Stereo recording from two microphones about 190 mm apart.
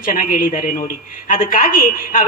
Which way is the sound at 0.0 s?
45° left (ahead or behind).